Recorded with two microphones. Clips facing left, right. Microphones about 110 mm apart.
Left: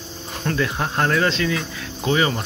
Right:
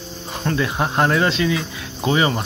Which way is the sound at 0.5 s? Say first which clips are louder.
Right 2 dB; 20° right (ahead or behind).